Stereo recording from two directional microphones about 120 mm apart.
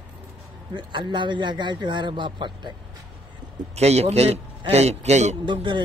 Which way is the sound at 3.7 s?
60° right (ahead or behind).